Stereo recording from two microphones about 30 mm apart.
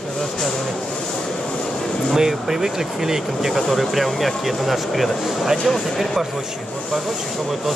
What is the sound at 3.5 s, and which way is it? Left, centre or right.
Speech, centre.